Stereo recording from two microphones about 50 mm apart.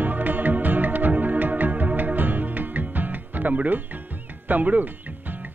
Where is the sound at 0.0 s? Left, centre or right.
Right.